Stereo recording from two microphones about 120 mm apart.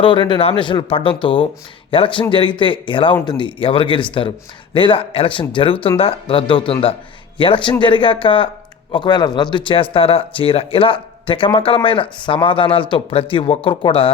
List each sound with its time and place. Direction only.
0.0 s a man's voice: 45° left (ahead or behind)